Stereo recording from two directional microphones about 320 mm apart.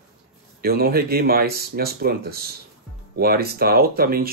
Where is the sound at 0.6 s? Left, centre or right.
Right.